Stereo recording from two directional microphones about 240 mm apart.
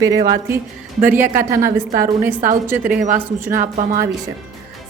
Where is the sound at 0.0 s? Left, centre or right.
Centre.